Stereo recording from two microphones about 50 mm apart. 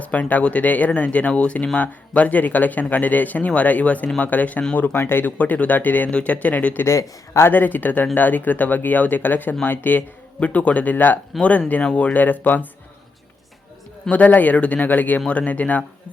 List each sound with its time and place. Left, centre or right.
0.0 s speech: left
5.4 s speech: left
6.1 s speech: left
6.8 s speech: left
7.4 s speech: left
10.4 s speech: left
14.1 s speech: left